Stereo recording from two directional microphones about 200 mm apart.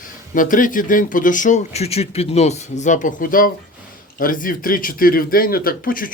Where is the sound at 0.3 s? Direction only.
40° left (ahead or behind).